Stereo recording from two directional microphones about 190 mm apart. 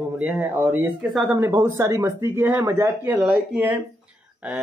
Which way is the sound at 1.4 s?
15° right (ahead or behind).